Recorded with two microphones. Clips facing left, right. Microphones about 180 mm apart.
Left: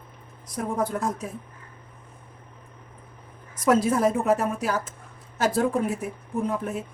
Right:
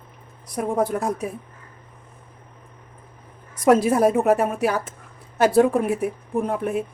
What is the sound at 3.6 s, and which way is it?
Speech, 65° right (ahead or behind).